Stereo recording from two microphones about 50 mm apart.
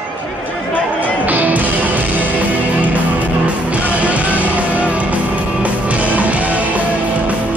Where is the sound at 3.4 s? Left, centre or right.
Right.